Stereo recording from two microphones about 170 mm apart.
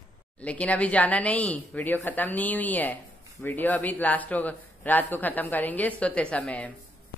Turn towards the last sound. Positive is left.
turn(degrees=5)  # may be behind; listen again after turning